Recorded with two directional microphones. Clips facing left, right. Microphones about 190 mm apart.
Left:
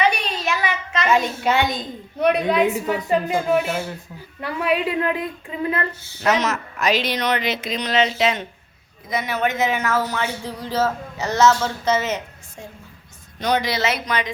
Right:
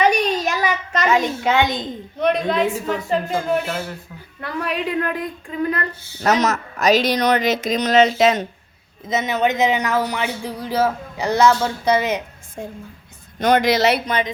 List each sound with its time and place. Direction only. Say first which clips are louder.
0.0 s child singing: right 4 dB; 40° right (ahead or behind)
1.8 s a woman's voice: even; 10° left (ahead or behind)
6.2 s speech: right 2 dB; 40° right (ahead or behind)
9.0 s speech: right 3 dB; 20° right (ahead or behind)
12.6 s a woman's voice: right 7 dB; 50° right (ahead or behind)